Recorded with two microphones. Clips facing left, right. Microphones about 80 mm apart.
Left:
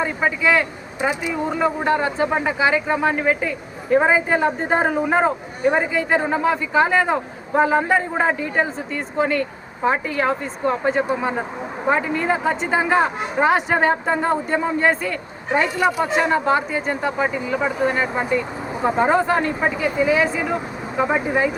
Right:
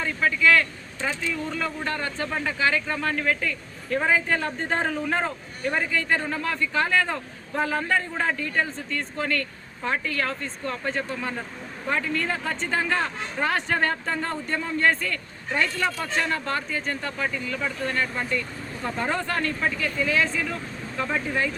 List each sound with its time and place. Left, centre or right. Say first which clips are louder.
0.0 s a man's voice: left 3 dB; left